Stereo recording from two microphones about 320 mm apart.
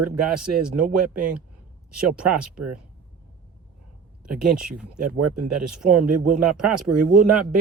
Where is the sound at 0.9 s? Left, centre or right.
Right.